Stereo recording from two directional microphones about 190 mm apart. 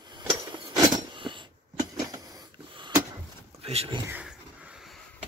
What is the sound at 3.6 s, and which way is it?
Speech, 30° right (ahead or behind).